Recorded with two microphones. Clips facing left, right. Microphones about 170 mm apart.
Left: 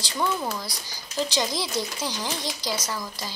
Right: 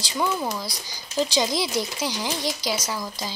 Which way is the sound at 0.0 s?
10° right (ahead or behind).